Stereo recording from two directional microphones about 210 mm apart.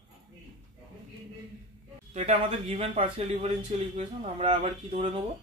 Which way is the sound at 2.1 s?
30° right (ahead or behind).